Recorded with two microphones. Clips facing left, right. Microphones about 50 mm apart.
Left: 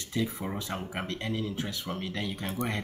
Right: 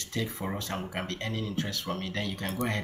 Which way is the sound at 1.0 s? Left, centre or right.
Centre.